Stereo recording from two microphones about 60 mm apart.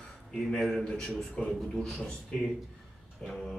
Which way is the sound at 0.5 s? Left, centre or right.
Centre.